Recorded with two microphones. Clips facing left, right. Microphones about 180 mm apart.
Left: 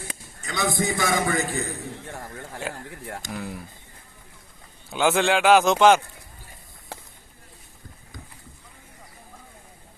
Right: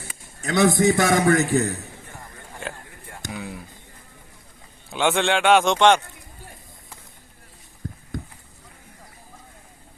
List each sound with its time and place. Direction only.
0.4 s a man's voice: 65° right (ahead or behind)
3.3 s speech: centre (ahead or behind)
4.9 s speech: centre (ahead or behind)